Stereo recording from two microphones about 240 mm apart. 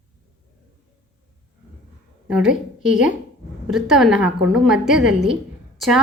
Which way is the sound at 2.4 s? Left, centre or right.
Left.